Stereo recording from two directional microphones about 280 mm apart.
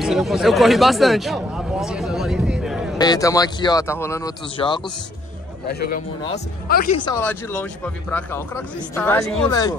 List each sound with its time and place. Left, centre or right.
0.0 s speech: centre
3.0 s speech: centre
5.7 s a man's voice: left
7.0 s speech: centre